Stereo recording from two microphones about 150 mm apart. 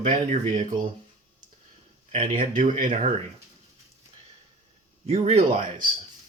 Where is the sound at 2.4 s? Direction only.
65° right (ahead or behind).